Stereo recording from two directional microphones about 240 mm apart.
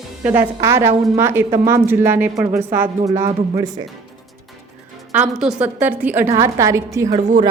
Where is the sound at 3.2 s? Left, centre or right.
Centre.